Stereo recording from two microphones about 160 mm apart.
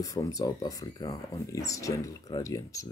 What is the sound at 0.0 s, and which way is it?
Speech, 20° left (ahead or behind).